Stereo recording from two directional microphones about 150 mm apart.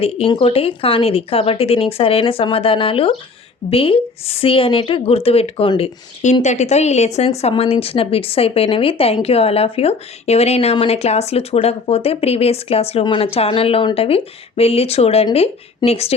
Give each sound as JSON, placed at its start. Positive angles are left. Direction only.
{"t": 0.0, "sound": "a woman's voice", "side_deg": 40}
{"t": 6.4, "sound": "a woman's voice", "side_deg": 50}